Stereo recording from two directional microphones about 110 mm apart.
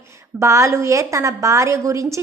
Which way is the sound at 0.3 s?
25° right (ahead or behind).